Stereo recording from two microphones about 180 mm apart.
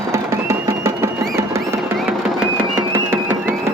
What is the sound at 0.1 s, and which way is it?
Music, 15° right (ahead or behind).